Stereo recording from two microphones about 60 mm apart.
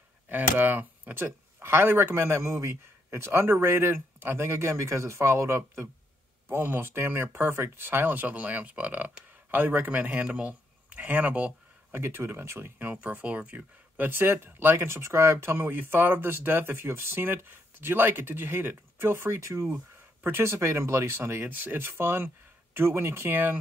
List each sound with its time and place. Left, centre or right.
0.3 s speech: right
6.5 s speech: right
11.9 s speech: right
12.9 s speech: right
15.4 s speech: right
21.4 s speech: right